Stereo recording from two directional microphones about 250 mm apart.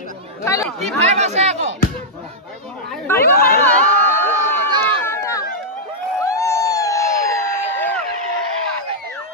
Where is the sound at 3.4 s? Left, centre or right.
Left.